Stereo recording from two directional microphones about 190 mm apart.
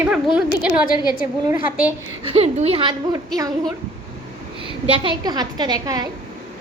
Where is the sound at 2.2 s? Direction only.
30° right (ahead or behind).